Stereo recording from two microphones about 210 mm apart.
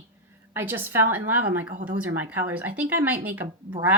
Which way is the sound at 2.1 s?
10° right (ahead or behind).